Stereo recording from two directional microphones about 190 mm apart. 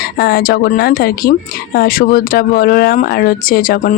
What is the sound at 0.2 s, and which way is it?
Speech, 50° left (ahead or behind).